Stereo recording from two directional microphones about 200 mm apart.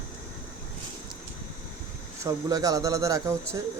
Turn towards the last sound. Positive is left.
turn(degrees=-15)  # may be behind; listen again after turning